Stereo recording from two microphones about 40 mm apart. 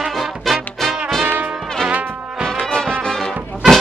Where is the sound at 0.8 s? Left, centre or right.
Centre.